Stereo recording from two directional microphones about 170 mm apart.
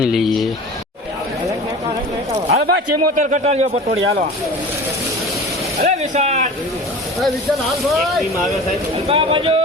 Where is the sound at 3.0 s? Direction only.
45° right (ahead or behind).